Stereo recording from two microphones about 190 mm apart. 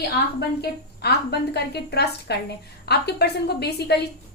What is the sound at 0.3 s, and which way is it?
A woman's voice, 60° left (ahead or behind).